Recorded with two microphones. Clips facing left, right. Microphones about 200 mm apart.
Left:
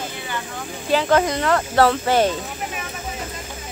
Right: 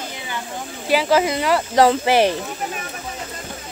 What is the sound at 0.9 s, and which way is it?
Speech, 5° right (ahead or behind).